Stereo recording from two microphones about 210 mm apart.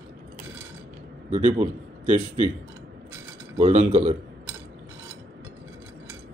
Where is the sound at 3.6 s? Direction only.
30° right (ahead or behind).